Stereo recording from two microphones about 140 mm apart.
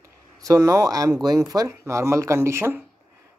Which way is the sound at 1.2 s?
25° right (ahead or behind).